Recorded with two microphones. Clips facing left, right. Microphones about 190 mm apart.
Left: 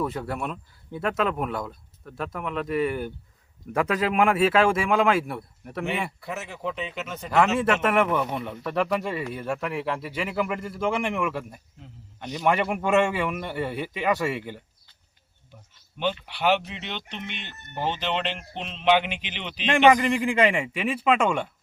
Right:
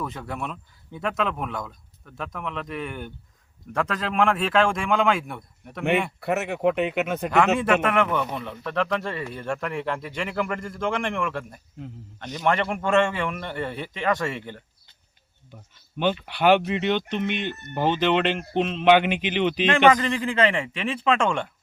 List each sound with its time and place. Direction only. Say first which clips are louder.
0.0 s speech: left 3 dB; centre (ahead or behind)
6.1 s speech: right 9 dB; 65° right (ahead or behind)
7.3 s speech: even; centre (ahead or behind)
16.0 s speech: right 4 dB; 50° right (ahead or behind)
19.6 s speech: left 2 dB; 15° left (ahead or behind)